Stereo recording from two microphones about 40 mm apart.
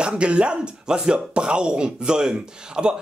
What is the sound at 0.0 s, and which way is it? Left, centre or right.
Speech, right.